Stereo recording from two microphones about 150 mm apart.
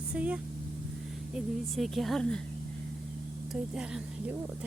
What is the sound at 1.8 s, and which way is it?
Speech, centre (ahead or behind).